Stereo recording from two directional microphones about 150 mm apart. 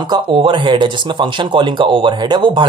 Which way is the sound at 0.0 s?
30° right (ahead or behind).